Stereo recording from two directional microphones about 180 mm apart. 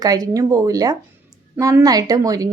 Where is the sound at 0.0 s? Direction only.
20° right (ahead or behind).